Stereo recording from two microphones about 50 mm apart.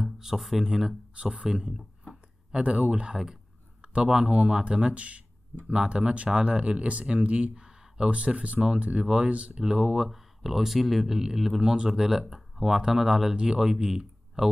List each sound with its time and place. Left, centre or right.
0.0 s speech: centre
1.1 s speech: right
2.6 s speech: right
7.6 s a sound: centre
8.1 s speech: right